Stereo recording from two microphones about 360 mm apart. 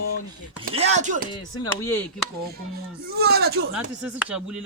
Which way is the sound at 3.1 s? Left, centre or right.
Right.